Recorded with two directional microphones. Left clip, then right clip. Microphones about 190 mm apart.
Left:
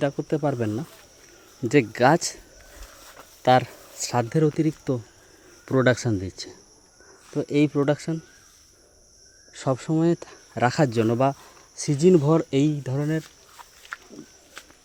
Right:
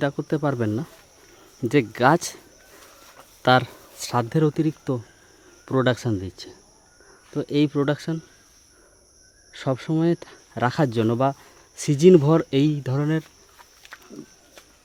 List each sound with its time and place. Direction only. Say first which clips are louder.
0.0 s speech: even; 15° right (ahead or behind)
1.6 s speech: even; 5° right (ahead or behind)
3.4 s speech: even; 10° right (ahead or behind)
9.5 s speech: even; 15° right (ahead or behind)
11.8 s speech: right 4 dB; 30° right (ahead or behind)